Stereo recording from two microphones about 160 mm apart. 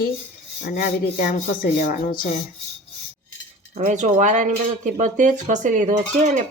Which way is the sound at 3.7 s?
50° right (ahead or behind).